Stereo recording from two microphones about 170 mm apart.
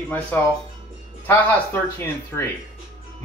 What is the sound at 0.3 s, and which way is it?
Speech, 10° left (ahead or behind).